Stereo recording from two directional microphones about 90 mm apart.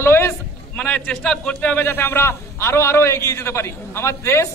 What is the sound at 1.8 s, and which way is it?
A man's voice, 25° left (ahead or behind).